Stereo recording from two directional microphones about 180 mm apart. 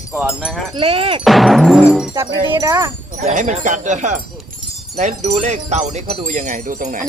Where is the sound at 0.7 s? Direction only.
30° right (ahead or behind).